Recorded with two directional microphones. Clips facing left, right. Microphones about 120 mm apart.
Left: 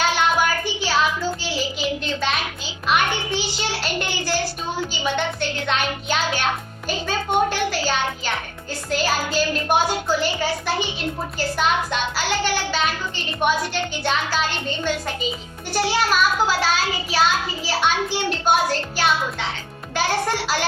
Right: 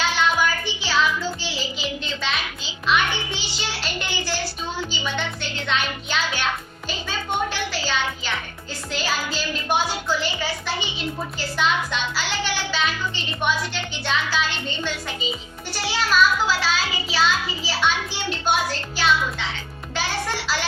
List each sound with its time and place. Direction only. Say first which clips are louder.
0.0 s music: left 2 dB; 50° left (ahead or behind)
2.8 s music: left 1 dB; 45° left (ahead or behind)
13.4 s a child's voice: left 4 dB; 45° left (ahead or behind)
15.7 s music: left 3 dB; 50° left (ahead or behind)